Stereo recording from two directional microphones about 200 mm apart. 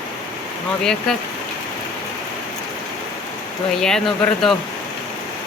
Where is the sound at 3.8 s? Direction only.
Centre (ahead or behind).